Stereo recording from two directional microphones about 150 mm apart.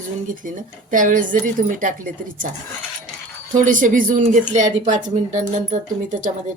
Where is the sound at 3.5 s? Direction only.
60° right (ahead or behind).